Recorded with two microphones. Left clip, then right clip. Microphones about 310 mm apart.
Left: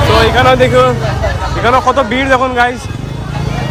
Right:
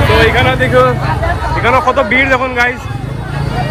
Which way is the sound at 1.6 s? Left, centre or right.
Centre.